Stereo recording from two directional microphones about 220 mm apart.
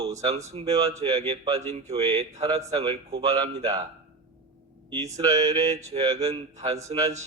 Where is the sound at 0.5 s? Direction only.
25° right (ahead or behind).